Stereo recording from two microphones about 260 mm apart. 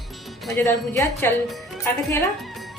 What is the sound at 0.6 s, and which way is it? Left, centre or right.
Speech, centre.